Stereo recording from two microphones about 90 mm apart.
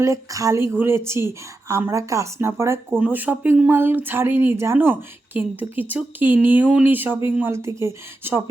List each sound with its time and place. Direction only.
0.0 s speech: 35° right (ahead or behind)
3.0 s speech: 20° right (ahead or behind)